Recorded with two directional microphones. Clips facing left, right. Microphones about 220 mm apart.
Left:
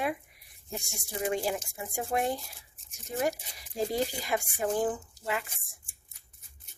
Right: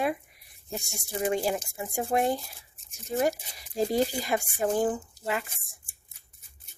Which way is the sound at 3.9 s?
35° right (ahead or behind).